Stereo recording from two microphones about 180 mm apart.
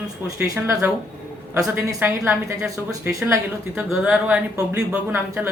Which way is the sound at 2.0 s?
10° right (ahead or behind).